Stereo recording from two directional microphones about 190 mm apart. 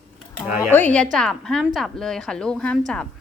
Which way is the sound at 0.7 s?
10° left (ahead or behind).